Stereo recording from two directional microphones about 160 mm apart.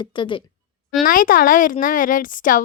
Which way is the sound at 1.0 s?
60° left (ahead or behind).